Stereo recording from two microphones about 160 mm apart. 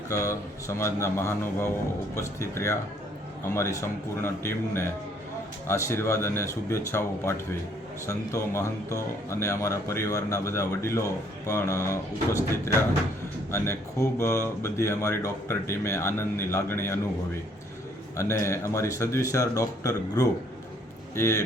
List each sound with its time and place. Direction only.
0.1 s speech: 20° left (ahead or behind)
18.2 s speech: 15° left (ahead or behind)